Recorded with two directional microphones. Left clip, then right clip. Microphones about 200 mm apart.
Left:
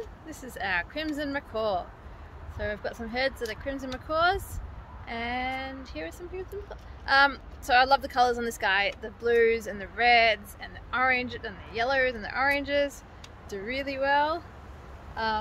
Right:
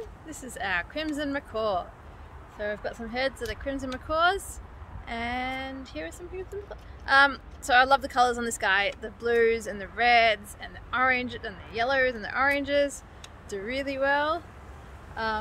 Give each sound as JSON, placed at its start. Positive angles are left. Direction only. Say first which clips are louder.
{"t": 0.3, "sound": "speech", "louder": "even", "side_deg": -15}